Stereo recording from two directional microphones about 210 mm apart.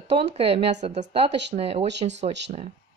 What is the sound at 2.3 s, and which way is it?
Music, 55° right (ahead or behind).